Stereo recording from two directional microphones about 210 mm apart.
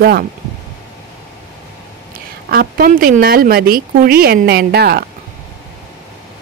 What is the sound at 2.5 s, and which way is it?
A woman's voice, 45° right (ahead or behind).